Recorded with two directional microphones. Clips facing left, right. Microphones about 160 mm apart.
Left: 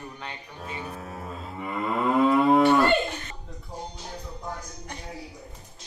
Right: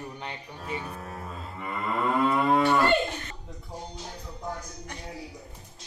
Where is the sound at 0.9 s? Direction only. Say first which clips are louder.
Left 1 dB; centre (ahead or behind).